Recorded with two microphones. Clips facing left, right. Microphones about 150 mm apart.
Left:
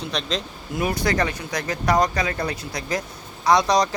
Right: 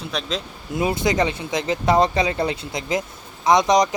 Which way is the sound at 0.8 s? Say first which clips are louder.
Right 2 dB; 25° right (ahead or behind).